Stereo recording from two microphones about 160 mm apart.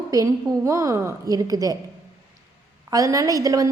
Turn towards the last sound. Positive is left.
turn(degrees=-20)  # may be behind; listen again after turning